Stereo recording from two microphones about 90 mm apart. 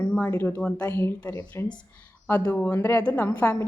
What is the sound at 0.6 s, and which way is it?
Speech, 15° left (ahead or behind).